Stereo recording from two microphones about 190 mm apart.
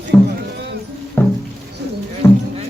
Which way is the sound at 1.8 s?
60° right (ahead or behind).